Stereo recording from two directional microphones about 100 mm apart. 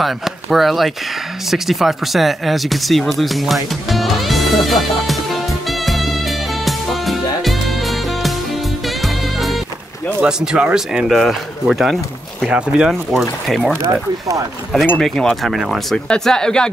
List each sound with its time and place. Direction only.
0.0 s speech: centre (ahead or behind)
1.5 s a sound: centre (ahead or behind)
8.8 s music: centre (ahead or behind)
10.2 s speech: 10° right (ahead or behind)
12.4 s speech: 10° right (ahead or behind)
13.5 s speech: 5° left (ahead or behind)
13.8 s speech: 35° right (ahead or behind)
15.0 s speech: 5° left (ahead or behind)